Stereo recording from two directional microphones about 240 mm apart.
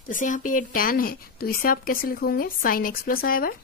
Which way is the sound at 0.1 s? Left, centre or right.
Left.